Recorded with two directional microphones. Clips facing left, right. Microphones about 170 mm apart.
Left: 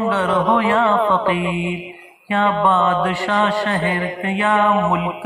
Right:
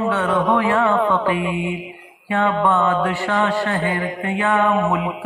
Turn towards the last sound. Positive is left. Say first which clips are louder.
# left 1 dB
turn(degrees=20)  # may be behind; listen again after turning